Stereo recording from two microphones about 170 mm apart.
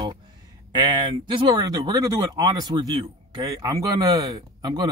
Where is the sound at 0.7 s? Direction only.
25° right (ahead or behind).